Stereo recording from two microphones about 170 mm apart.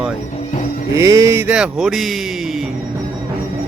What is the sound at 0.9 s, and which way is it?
Speech, 20° right (ahead or behind).